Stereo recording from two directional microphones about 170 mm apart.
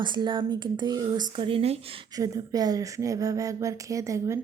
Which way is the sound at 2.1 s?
20° right (ahead or behind).